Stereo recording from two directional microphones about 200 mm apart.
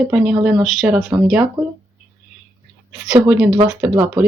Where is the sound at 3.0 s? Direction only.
5° right (ahead or behind).